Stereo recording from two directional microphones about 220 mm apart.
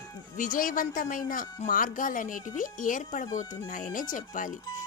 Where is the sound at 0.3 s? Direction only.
40° left (ahead or behind).